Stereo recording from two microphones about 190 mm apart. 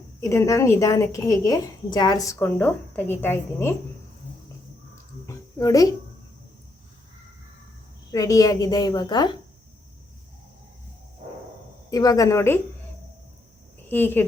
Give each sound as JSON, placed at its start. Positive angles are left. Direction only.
{"t": 0.2, "sound": "a woman's voice", "side_deg": 15}
{"t": 5.2, "sound": "a sound", "side_deg": 15}
{"t": 8.1, "sound": "a woman's voice", "side_deg": 20}
{"t": 11.9, "sound": "a woman's voice", "side_deg": 20}
{"t": 13.8, "sound": "speech", "side_deg": 10}